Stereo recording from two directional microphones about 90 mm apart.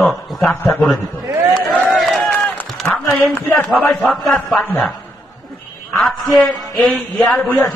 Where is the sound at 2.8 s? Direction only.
25° left (ahead or behind).